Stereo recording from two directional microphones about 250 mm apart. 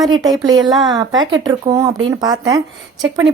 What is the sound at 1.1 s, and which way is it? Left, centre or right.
Speech, right.